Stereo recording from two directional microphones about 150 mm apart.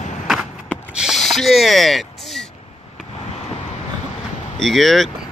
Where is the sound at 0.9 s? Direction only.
5° right (ahead or behind).